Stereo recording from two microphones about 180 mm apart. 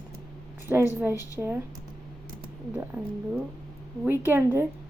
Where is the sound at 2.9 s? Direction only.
15° right (ahead or behind).